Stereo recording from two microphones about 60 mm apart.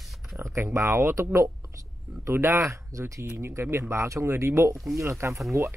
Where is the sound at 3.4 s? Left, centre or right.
Right.